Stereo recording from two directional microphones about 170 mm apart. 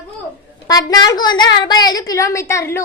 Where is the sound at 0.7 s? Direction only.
20° left (ahead or behind).